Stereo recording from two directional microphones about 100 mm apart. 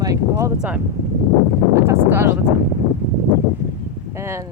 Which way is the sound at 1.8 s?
25° right (ahead or behind).